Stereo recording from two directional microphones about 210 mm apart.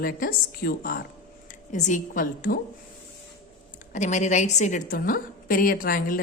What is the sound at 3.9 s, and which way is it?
A woman's voice, 35° left (ahead or behind).